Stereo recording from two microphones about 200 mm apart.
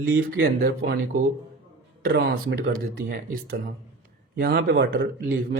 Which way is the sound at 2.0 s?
50° right (ahead or behind).